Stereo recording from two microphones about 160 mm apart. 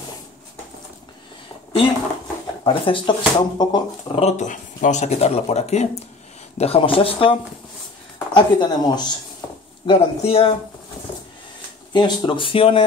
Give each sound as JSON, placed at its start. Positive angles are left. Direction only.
{"t": 2.6, "sound": "speech", "side_deg": 30}
{"t": 4.2, "sound": "speech", "side_deg": 45}
{"t": 8.4, "sound": "speech", "side_deg": 25}
{"t": 9.4, "sound": "a sound", "side_deg": 20}
{"t": 9.8, "sound": "speech", "side_deg": 35}
{"t": 11.9, "sound": "speech", "side_deg": 30}